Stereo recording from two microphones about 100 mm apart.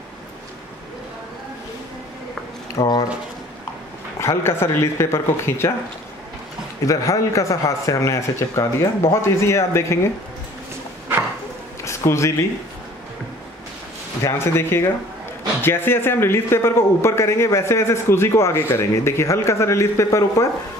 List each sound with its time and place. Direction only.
2.7 s speech: 40° left (ahead or behind)
4.2 s a man's voice: 25° left (ahead or behind)
6.9 s a man's voice: 30° left (ahead or behind)
11.8 s speech: 25° left (ahead or behind)
14.2 s a man's voice: 25° left (ahead or behind)